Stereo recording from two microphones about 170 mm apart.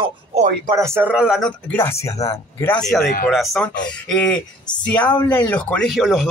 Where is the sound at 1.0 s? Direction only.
5° right (ahead or behind); by 5.9 s 10° left (ahead or behind).